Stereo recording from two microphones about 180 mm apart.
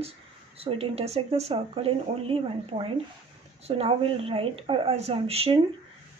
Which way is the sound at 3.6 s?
35° right (ahead or behind).